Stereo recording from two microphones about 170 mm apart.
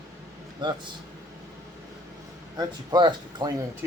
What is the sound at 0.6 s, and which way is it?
Speech, 25° right (ahead or behind).